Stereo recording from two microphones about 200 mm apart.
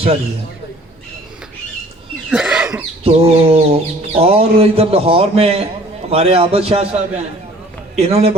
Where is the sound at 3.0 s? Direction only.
30° right (ahead or behind).